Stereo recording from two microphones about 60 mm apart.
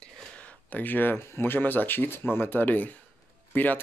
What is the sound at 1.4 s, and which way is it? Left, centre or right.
Speech, left.